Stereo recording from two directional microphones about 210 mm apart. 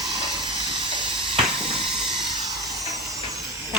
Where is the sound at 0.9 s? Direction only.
25° right (ahead or behind).